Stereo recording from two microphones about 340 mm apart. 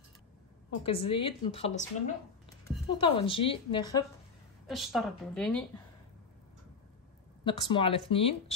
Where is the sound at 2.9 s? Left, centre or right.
Centre.